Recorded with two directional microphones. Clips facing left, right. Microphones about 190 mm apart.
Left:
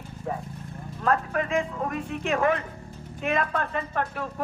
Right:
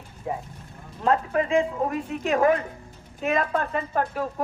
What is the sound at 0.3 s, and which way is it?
A woman's voice, 15° right (ahead or behind).